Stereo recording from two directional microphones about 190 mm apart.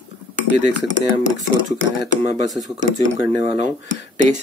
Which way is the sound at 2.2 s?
40° right (ahead or behind).